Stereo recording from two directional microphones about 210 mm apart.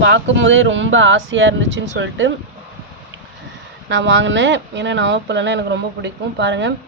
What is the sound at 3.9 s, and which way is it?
Speech, 60° right (ahead or behind).